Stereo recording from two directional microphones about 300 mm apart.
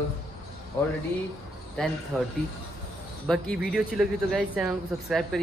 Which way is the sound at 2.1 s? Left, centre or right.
Centre.